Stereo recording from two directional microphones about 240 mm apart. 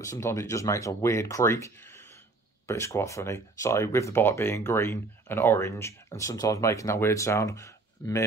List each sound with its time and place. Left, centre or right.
0.0 s speech: centre